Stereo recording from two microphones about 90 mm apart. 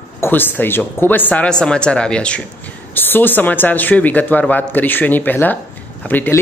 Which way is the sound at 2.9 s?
20° left (ahead or behind).